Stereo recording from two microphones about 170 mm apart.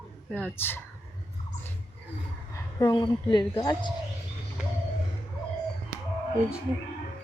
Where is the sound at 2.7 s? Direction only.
25° left (ahead or behind).